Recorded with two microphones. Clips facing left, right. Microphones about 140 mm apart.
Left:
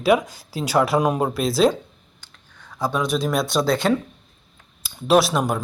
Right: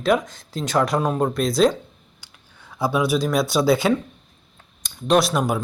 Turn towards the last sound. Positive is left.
turn(degrees=0)  # may be behind; listen again after turning